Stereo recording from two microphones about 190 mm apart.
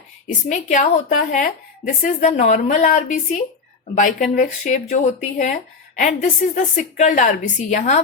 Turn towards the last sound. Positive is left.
turn(degrees=40)  # may be behind; listen again after turning